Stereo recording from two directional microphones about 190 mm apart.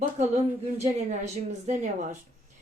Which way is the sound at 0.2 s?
35° right (ahead or behind).